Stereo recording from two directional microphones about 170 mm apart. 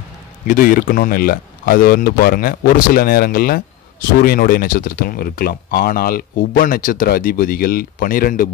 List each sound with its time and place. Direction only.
0.5 s speech: 55° left (ahead or behind)